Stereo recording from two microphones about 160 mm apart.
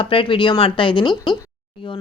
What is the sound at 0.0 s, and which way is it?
Speech, 35° left (ahead or behind).